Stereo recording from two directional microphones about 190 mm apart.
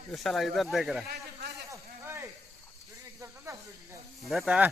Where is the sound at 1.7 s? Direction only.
15° right (ahead or behind).